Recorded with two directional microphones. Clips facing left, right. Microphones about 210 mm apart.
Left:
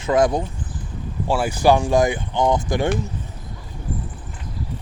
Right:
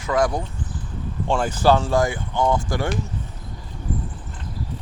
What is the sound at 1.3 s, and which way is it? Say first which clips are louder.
Speech: left 1 dB; 10° left (ahead or behind).